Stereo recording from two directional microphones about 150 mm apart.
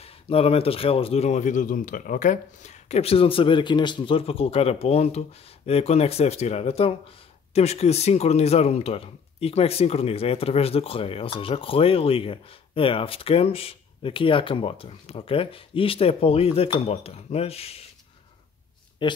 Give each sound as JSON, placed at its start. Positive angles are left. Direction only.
{"t": 0.0, "sound": "speech", "side_deg": 40}
{"t": 19.0, "sound": "speech", "side_deg": 30}